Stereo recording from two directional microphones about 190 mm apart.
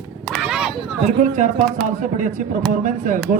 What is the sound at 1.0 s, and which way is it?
A man's voice, 40° right (ahead or behind).